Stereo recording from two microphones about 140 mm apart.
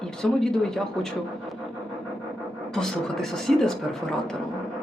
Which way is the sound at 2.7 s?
5° left (ahead or behind).